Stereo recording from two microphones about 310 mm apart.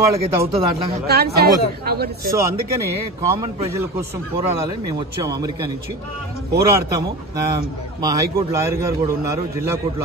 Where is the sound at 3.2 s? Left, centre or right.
Centre.